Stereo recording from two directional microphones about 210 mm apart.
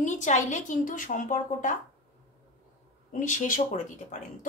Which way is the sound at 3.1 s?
35° left (ahead or behind).